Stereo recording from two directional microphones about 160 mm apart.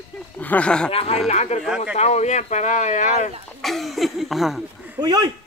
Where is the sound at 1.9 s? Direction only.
45° left (ahead or behind).